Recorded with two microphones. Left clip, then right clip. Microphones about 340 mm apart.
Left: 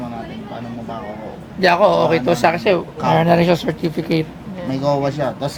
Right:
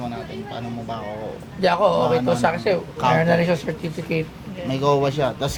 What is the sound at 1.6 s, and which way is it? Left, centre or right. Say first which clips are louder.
Speech: left 5 dB; left.